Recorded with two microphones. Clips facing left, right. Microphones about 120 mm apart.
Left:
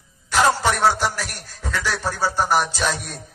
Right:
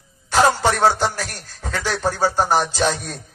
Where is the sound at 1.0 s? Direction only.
30° right (ahead or behind).